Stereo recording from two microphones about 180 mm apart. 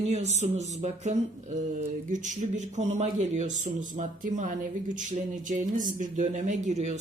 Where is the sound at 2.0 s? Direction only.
45° right (ahead or behind).